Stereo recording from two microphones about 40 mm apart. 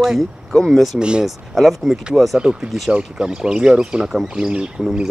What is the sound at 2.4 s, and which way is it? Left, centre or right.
A woman's voice, centre.